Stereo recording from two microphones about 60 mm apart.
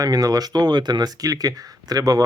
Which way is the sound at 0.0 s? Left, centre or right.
Right.